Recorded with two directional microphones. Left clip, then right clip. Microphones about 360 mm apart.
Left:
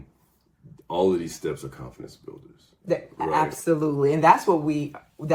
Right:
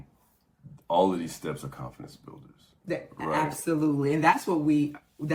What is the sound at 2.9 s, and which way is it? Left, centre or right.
Speech, centre.